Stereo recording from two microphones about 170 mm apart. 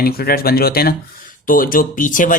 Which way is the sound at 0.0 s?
65° left (ahead or behind).